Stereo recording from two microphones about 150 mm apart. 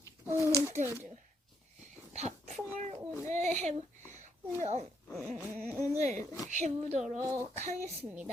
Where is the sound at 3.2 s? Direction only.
55° right (ahead or behind).